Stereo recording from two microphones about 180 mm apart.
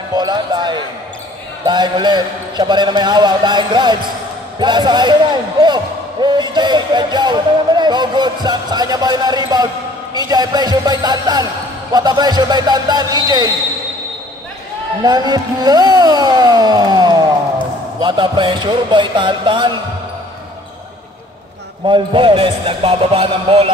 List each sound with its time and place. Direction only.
0.1 s basketball bounce: 20° right (ahead or behind)
1.7 s speech: 25° right (ahead or behind)
15.0 s speech: 20° right (ahead or behind)
21.8 s speech: 25° right (ahead or behind)